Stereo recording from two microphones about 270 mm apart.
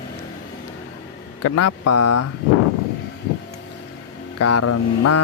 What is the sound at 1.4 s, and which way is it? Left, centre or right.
Speech, left.